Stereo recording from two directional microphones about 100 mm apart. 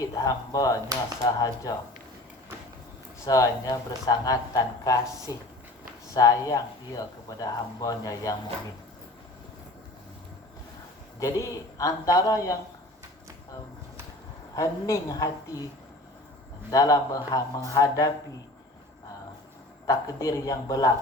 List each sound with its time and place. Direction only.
0.0 s speech: 40° left (ahead or behind)
3.2 s speech: 35° left (ahead or behind)
11.2 s speech: 30° left (ahead or behind)
14.5 s speech: 30° left (ahead or behind)
16.7 s speech: 35° left (ahead or behind)
19.9 s speech: 35° left (ahead or behind)